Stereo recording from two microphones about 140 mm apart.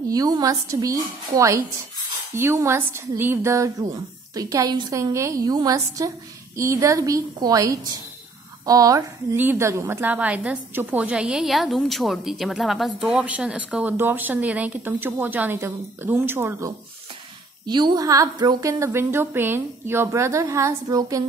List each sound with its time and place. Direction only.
0.1 s a woman's voice: 25° right (ahead or behind)
17.6 s a woman's voice: 30° right (ahead or behind)